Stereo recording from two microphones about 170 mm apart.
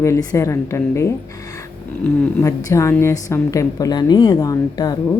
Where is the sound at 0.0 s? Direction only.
20° left (ahead or behind).